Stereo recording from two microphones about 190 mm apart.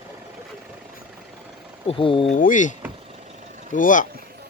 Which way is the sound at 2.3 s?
45° left (ahead or behind).